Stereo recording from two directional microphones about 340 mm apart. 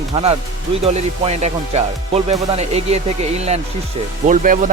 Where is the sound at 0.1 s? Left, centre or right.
Centre.